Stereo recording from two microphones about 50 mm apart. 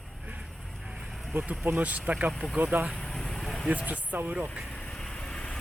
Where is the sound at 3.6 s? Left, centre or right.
Right.